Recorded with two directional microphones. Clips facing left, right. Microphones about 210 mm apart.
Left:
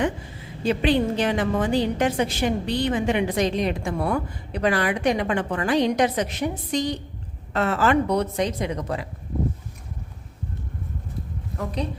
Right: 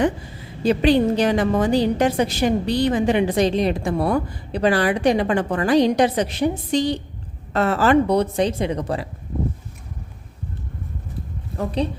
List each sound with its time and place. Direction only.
0.6 s a woman's voice: 40° right (ahead or behind)
11.5 s a woman's voice: 30° right (ahead or behind)